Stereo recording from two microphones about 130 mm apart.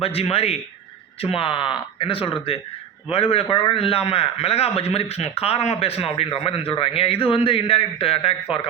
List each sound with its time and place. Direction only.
0.0 s a man's voice: 50° left (ahead or behind)